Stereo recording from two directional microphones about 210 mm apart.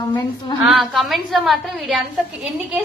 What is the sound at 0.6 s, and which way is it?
A woman's voice, centre (ahead or behind).